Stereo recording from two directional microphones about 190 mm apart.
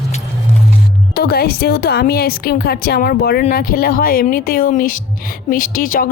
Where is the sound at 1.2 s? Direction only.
55° left (ahead or behind).